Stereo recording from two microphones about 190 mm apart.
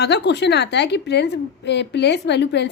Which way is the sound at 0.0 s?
60° left (ahead or behind).